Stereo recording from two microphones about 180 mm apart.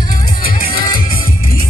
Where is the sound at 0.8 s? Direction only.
50° left (ahead or behind).